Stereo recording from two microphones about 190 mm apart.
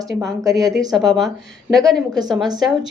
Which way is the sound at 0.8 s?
Centre (ahead or behind).